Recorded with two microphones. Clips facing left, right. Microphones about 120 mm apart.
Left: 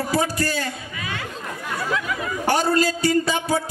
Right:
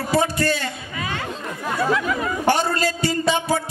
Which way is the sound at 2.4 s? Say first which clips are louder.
Left 2 dB; 25° right (ahead or behind).